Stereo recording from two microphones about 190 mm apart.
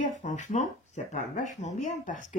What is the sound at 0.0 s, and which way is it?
Speech, 40° left (ahead or behind).